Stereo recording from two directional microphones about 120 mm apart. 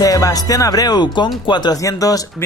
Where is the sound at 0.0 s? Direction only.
30° left (ahead or behind).